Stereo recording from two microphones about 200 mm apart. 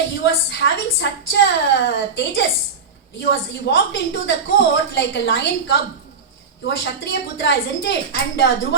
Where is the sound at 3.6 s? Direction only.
60° left (ahead or behind).